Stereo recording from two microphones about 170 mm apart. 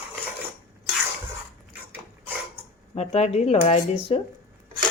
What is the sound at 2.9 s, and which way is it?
A woman's voice, 35° left (ahead or behind).